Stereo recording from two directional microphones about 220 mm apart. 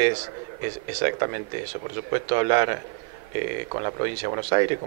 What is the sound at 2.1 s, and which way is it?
A man's voice, 20° right (ahead or behind).